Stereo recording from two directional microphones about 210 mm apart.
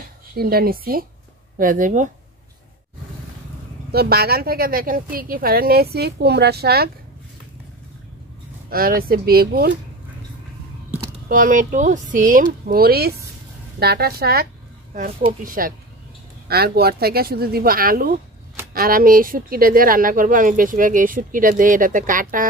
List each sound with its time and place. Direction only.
0.4 s a woman's voice: 45° right (ahead or behind)
3.9 s a woman's voice: 50° right (ahead or behind)
8.6 s a woman's voice: 45° right (ahead or behind)
11.2 s a woman's voice: 40° right (ahead or behind)